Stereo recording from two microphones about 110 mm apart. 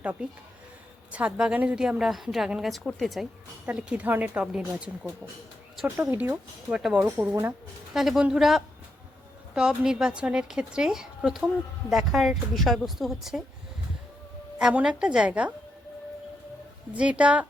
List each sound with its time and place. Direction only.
0.0 s a woman's voice: 10° right (ahead or behind)
3.7 s a woman's voice: 10° right (ahead or behind)
6.3 s a woman's voice: 10° right (ahead or behind)
7.0 s a woman's voice: 20° right (ahead or behind)
7.9 s a woman's voice: 5° right (ahead or behind)
14.6 s a woman's voice: 10° right (ahead or behind)
16.9 s a woman's voice: 10° right (ahead or behind)